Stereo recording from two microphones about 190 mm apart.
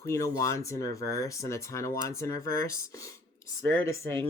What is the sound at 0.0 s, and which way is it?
Speech, 15° left (ahead or behind).